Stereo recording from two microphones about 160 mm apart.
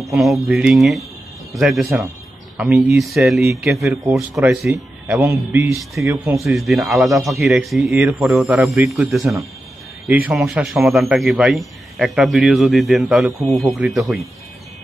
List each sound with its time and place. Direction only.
0.0 s speech: centre (ahead or behind)
3.8 s speech: 15° right (ahead or behind)
4.1 s speech: centre (ahead or behind); by 6.4 s 20° right (ahead or behind)
6.4 s speech: centre (ahead or behind)
8.7 s speech: 15° right (ahead or behind)
9.1 s speech: centre (ahead or behind)
10.0 s a man's voice: 10° right (ahead or behind)